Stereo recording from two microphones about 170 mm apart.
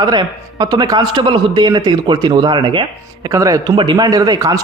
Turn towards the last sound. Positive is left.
turn(degrees=-20)  # may be behind; listen again after turning